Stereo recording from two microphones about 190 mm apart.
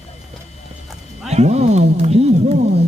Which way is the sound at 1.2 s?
35° right (ahead or behind).